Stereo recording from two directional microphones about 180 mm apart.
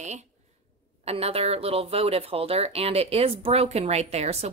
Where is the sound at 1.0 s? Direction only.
35° right (ahead or behind).